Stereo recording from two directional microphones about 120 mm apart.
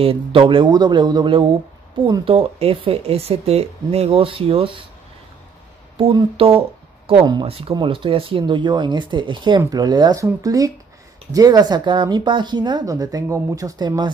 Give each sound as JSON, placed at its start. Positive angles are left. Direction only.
{"t": 0.0, "sound": "speech", "side_deg": -50}
{"t": 6.3, "sound": "speech", "side_deg": -50}